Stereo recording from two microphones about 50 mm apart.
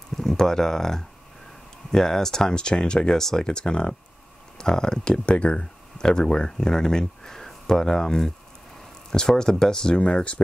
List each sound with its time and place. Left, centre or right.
0.2 s speech: centre